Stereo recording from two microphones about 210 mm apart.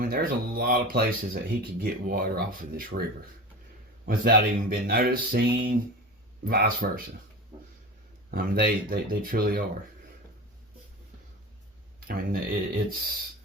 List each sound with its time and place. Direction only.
0.0 s speech: 45° right (ahead or behind)
4.0 s speech: 45° right (ahead or behind)
8.3 s speech: 45° right (ahead or behind)
11.9 s speech: 45° right (ahead or behind)